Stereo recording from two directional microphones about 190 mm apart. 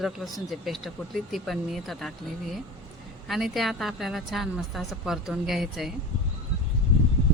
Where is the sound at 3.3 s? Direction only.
Centre (ahead or behind).